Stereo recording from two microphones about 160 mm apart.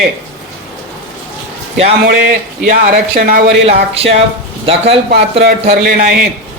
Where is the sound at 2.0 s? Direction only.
60° right (ahead or behind).